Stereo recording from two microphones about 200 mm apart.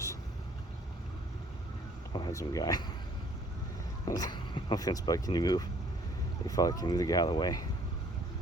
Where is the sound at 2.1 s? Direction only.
20° left (ahead or behind).